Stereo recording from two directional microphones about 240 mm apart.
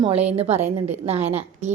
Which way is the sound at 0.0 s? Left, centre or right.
Right.